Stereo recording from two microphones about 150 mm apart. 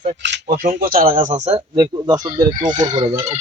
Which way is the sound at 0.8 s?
75° right (ahead or behind).